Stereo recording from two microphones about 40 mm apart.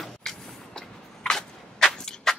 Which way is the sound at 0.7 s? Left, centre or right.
Centre.